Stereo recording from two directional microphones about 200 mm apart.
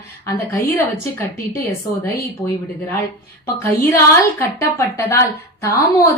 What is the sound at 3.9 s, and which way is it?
A woman's voice, 15° left (ahead or behind).